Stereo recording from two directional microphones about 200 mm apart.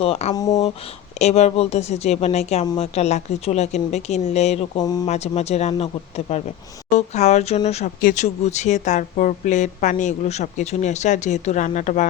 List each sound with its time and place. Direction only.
0.0 s speech: 30° left (ahead or behind)
0.3 s speech: 20° left (ahead or behind)
1.2 s speech: 35° left (ahead or behind)
4.8 s speech: 20° left (ahead or behind)
5.0 s speech: 35° left (ahead or behind)